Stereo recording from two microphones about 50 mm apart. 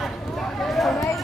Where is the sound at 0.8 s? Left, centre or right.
Centre.